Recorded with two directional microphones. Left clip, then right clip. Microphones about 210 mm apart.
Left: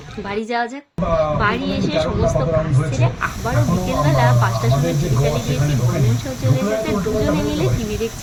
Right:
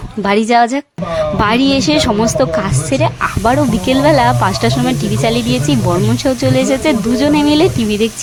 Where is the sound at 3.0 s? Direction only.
50° right (ahead or behind).